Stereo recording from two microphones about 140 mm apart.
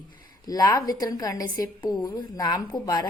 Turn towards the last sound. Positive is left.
turn(degrees=30)  # may be behind; listen again after turning